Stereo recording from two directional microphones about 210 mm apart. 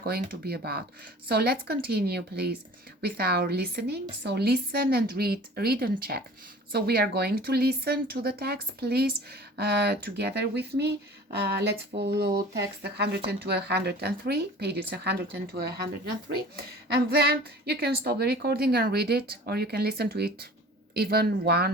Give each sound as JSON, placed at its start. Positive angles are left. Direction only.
{"t": 0.0, "sound": "speech", "side_deg": -50}
{"t": 11.9, "sound": "speech", "side_deg": -50}
{"t": 16.9, "sound": "speech", "side_deg": -50}